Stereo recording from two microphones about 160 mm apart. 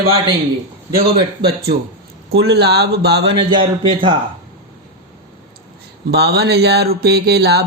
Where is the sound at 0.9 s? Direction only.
85° right.